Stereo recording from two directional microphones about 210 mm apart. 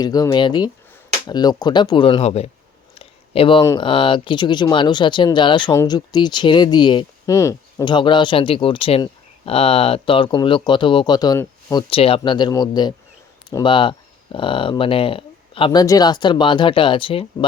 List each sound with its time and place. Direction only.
0.0 s speech: 20° left (ahead or behind)